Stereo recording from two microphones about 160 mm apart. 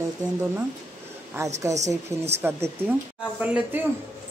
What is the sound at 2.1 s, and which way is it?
Speech, 20° right (ahead or behind).